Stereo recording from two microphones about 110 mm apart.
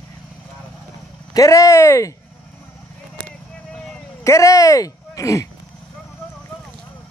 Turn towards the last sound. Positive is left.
turn(degrees=30)  # may be behind; listen again after turning